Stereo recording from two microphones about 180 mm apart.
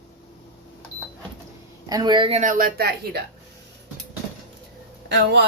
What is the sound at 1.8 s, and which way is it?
Speech, 20° right (ahead or behind).